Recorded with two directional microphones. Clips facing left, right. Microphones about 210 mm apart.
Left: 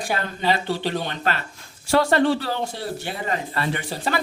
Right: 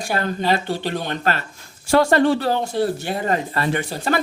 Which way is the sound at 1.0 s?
45° right (ahead or behind).